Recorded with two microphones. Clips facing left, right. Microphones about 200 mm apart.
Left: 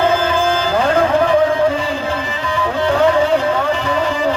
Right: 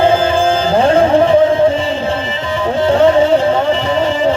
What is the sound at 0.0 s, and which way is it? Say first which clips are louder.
Music: right 4 dB; 30° right (ahead or behind).